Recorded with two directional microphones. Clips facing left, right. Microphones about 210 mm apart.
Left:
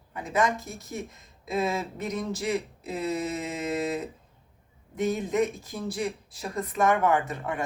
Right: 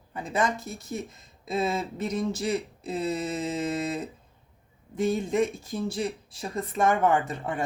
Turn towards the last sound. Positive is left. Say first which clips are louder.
# even
turn(degrees=-30)  # may be behind; listen again after turning